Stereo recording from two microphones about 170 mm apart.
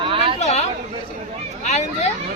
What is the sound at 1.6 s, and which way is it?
Speech, 40° left (ahead or behind).